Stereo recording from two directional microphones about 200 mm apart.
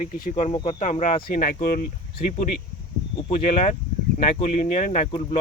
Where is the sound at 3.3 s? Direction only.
30° left (ahead or behind).